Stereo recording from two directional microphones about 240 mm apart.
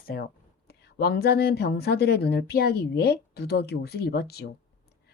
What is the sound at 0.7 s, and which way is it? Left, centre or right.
A woman's voice, left.